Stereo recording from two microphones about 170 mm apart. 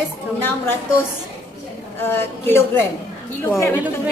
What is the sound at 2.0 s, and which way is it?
Speech, 15° left (ahead or behind).